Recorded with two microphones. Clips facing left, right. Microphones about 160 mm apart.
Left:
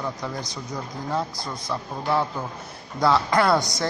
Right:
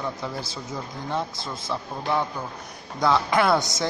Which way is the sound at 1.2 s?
25° right (ahead or behind).